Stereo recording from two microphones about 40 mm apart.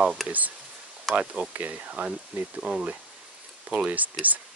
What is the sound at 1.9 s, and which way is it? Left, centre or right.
Speech, right.